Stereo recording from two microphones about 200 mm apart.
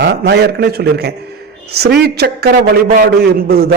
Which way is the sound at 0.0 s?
55° right (ahead or behind).